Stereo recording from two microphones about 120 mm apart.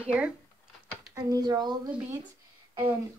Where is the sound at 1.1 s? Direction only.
30° right (ahead or behind).